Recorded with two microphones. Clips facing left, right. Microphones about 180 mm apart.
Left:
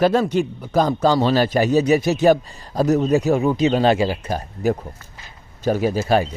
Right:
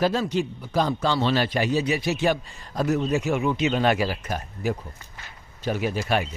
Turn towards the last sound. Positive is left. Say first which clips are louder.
# left 7 dB
turn(degrees=40)  # may be behind; listen again after turning